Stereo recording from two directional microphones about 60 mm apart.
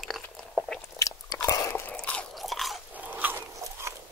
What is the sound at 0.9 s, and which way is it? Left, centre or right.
Biting, left.